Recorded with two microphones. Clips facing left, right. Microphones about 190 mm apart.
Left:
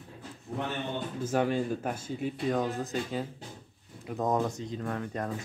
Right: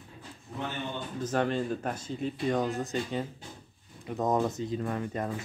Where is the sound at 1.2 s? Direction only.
10° left (ahead or behind).